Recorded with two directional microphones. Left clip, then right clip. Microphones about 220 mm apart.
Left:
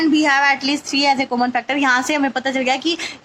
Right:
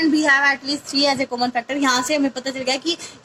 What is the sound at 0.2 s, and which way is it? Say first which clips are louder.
A woman's voice: even; 30° left (ahead or behind).